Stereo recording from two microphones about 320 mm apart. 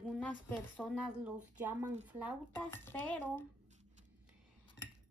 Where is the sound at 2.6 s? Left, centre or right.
Centre.